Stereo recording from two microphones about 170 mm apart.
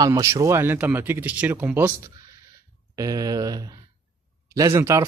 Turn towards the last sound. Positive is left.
turn(degrees=-15)  # may be behind; listen again after turning